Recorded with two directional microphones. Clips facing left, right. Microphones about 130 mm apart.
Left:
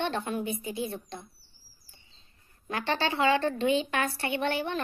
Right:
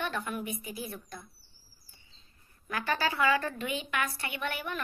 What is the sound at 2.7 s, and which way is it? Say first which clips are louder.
A woman's voice: left 2 dB; 25° left (ahead or behind).